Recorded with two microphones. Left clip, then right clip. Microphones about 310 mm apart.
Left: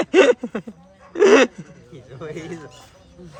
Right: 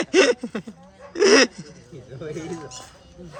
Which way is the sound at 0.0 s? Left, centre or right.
Centre.